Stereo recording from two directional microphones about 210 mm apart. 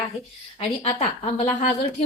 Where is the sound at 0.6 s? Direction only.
30° left (ahead or behind).